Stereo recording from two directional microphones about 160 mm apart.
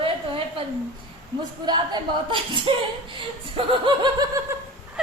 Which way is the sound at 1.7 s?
30° right (ahead or behind).